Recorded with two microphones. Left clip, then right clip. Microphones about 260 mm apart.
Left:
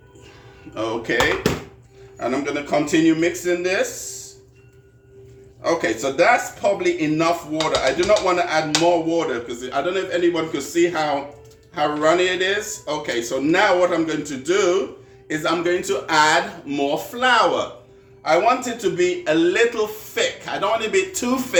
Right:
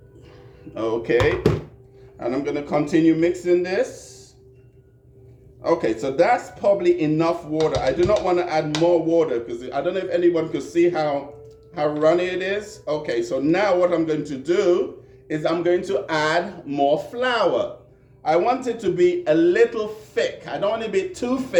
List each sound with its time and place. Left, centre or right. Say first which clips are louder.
0.7 s a man's voice: right 2 dB; centre
5.6 s a man's voice: left 1 dB; centre